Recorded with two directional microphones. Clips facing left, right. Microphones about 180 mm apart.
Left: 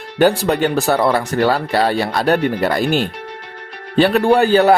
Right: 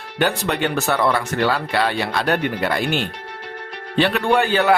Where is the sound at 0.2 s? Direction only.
40° left (ahead or behind).